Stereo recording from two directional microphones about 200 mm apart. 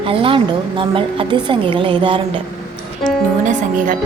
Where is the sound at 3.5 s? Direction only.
40° right (ahead or behind).